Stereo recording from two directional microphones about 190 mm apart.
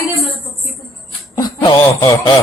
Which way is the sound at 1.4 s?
20° left (ahead or behind).